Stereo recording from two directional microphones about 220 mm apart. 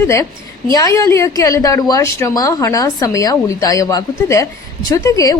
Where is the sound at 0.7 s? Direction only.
15° left (ahead or behind).